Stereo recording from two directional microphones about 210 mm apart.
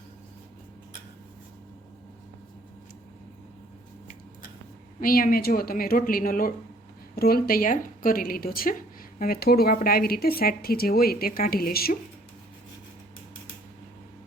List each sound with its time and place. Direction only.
4.9 s speech: 40° left (ahead or behind)